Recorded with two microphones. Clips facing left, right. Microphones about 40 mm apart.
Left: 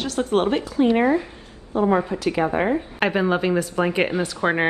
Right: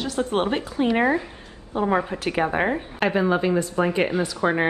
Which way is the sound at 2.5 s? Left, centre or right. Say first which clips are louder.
Left 2 dB; centre.